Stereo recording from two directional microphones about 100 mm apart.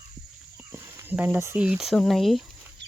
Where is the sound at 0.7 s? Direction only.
25° right (ahead or behind).